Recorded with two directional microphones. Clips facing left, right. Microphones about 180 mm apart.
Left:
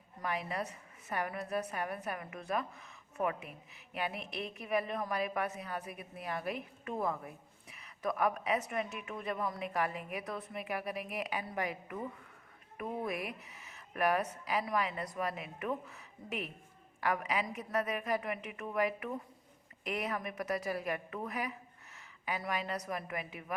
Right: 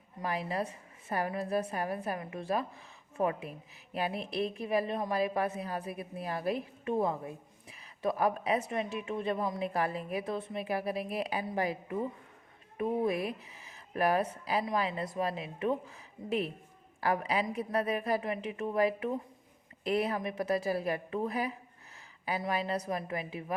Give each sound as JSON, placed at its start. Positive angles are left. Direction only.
{"t": 0.2, "sound": "a woman's voice", "side_deg": -30}